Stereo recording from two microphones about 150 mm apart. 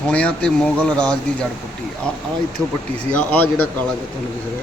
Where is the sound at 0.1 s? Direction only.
5° left (ahead or behind).